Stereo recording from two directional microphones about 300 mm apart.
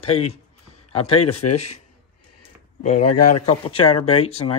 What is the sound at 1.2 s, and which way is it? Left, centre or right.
Speech, left.